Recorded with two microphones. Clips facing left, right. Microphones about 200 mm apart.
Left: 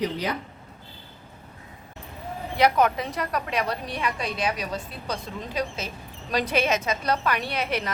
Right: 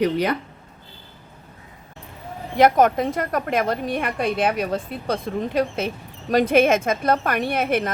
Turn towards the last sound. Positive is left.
turn(degrees=-50)  # may be behind; listen again after turning